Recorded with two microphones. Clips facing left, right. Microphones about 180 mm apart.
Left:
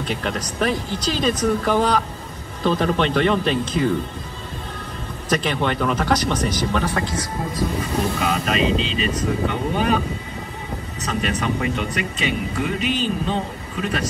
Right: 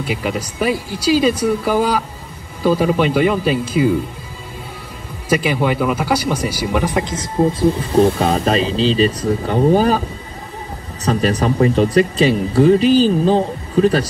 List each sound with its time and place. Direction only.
0.0 s speech: 5° right (ahead or behind)
5.3 s speech: 10° right (ahead or behind); by 10.0 s 35° right (ahead or behind)
11.1 s speech: 35° right (ahead or behind)